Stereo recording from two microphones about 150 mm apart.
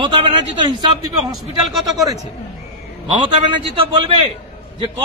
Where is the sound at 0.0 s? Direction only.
35° right (ahead or behind).